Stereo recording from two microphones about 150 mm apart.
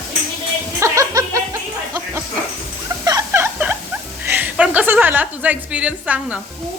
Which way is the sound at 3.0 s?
20° right (ahead or behind).